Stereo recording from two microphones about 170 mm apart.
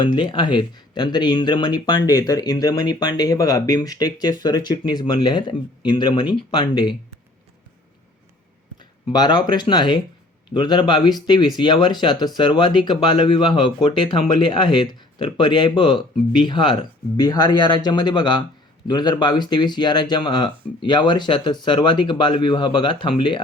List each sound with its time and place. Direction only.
0.1 s speech: 30° left (ahead or behind)
8.8 s speech: 25° left (ahead or behind)